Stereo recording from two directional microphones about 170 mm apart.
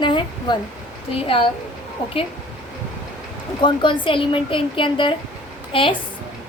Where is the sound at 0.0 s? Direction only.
30° left (ahead or behind).